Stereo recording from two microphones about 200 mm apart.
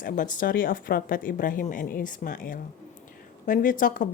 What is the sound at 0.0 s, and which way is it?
A woman's voice, 40° left (ahead or behind).